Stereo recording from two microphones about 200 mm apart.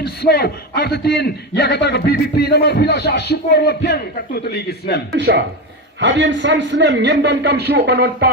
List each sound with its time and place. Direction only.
0.0 s a man's voice: 55° left (ahead or behind)
5.1 s speech: 55° right (ahead or behind)